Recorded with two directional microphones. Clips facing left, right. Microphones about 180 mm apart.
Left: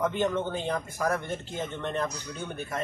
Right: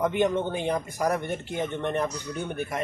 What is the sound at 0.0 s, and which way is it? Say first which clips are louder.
A man's voice: right 3 dB; 15° right (ahead or behind).